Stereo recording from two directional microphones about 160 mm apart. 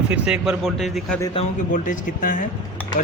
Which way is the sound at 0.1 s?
5° right (ahead or behind).